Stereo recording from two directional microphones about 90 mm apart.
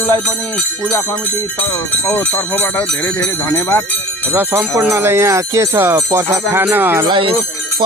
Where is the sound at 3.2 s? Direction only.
35° left (ahead or behind).